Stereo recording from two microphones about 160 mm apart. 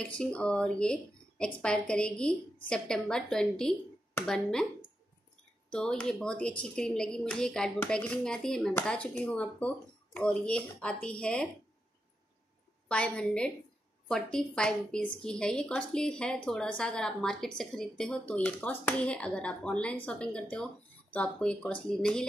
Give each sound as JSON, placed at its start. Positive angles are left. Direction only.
{"t": 0.2, "sound": "a woman's voice", "side_deg": 5}
{"t": 5.7, "sound": "a woman's voice", "side_deg": 5}
{"t": 12.8, "sound": "a woman's voice", "side_deg": 5}